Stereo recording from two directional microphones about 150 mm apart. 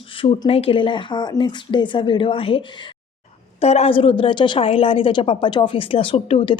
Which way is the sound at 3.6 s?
45° left (ahead or behind).